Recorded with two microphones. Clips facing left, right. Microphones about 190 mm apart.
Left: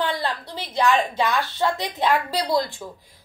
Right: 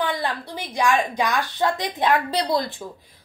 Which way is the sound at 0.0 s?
15° right (ahead or behind).